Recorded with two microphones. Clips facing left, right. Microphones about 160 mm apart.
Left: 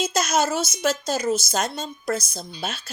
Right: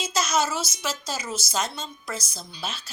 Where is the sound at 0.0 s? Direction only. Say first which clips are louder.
Left 3 dB; 50° left (ahead or behind).